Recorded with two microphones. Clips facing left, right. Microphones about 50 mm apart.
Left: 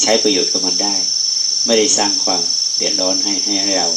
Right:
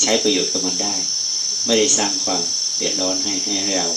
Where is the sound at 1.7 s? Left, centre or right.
Centre.